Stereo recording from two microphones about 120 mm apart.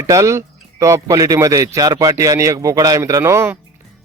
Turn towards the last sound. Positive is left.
turn(degrees=-20)  # may be behind; listen again after turning